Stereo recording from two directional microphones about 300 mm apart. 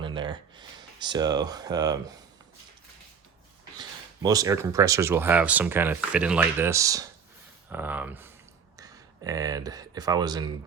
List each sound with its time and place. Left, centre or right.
0.0 s a sound: centre
1.0 s speech: centre
3.8 s speech: centre